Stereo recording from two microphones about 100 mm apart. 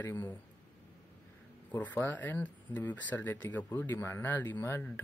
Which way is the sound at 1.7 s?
15° left (ahead or behind).